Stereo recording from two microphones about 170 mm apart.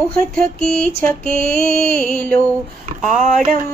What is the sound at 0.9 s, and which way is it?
Speech, 10° left (ahead or behind).